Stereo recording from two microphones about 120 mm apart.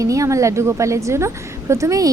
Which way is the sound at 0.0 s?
25° right (ahead or behind).